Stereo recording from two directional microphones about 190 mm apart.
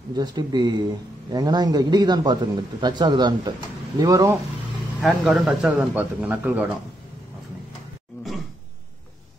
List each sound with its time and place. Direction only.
0.1 s a man's voice: 20° right (ahead or behind)
5.0 s speech: 5° right (ahead or behind)